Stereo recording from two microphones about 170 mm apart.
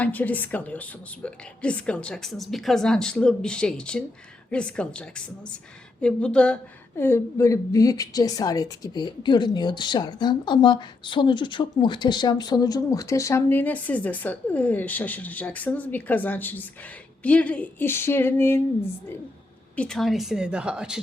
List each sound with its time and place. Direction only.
0.0 s a woman's voice: 10° left (ahead or behind)
19.7 s a woman's voice: 5° left (ahead or behind)